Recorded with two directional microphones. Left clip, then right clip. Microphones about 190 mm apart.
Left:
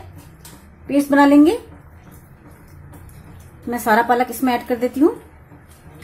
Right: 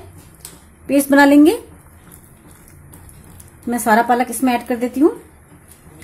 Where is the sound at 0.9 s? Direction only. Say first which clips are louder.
Right 2 dB; 25° right (ahead or behind).